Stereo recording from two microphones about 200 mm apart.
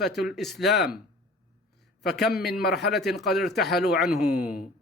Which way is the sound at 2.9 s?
Centre (ahead or behind).